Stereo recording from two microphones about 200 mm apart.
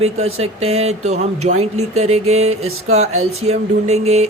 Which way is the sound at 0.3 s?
30° right (ahead or behind).